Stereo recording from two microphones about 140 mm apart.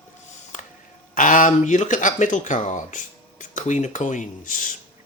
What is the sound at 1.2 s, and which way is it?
Speech, 70° left (ahead or behind).